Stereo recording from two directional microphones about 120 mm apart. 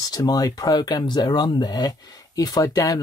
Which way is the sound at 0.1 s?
35° left (ahead or behind).